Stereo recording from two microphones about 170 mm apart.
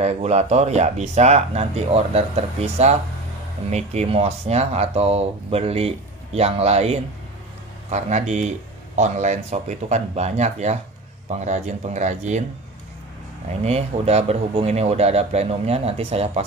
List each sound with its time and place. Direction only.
0.0 s speech: 40° right (ahead or behind)
13.7 s speech: 40° right (ahead or behind)